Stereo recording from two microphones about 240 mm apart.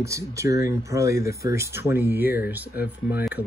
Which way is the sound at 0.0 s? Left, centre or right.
Centre.